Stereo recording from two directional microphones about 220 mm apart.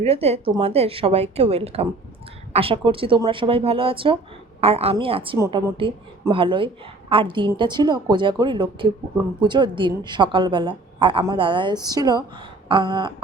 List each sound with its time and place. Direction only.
0.0 s a woman's voice: 30° right (ahead or behind)